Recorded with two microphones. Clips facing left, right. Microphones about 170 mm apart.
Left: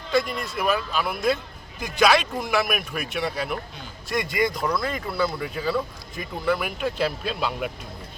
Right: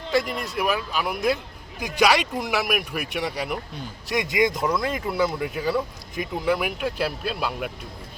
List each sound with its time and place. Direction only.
0.1 s speech: 15° right (ahead or behind)